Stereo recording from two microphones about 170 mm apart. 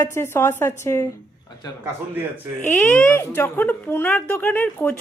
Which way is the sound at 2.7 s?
10° left (ahead or behind).